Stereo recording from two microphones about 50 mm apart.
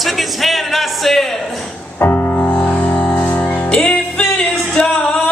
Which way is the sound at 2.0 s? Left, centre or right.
Left.